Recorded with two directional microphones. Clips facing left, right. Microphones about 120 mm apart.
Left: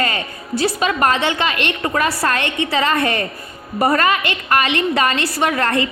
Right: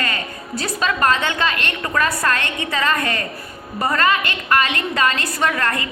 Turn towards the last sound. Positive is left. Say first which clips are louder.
# left 3 dB
turn(degrees=30)  # may be behind; listen again after turning